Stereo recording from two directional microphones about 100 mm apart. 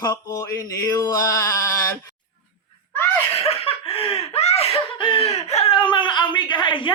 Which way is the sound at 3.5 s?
70° left (ahead or behind).